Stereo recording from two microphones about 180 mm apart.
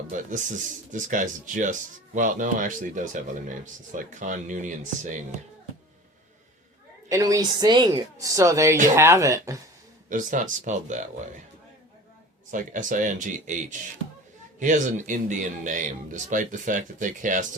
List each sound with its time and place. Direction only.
0.1 s speech: 45° right (ahead or behind)
7.1 s a woman's voice: 20° right (ahead or behind)
10.1 s speech: 45° right (ahead or behind)
12.5 s speech: 45° right (ahead or behind)